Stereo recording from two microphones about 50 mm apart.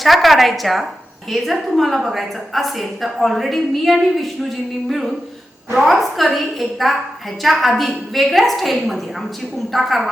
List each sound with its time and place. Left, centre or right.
0.0 s a woman's voice: centre